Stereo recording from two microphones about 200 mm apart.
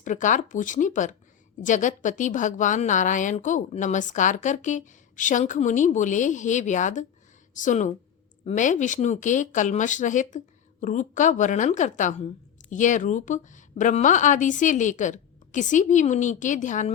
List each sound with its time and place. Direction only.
0.0 s a woman's voice: 40° left (ahead or behind)